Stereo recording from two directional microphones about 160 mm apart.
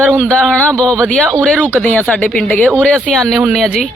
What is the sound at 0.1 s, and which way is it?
A man's voice, 5° left (ahead or behind).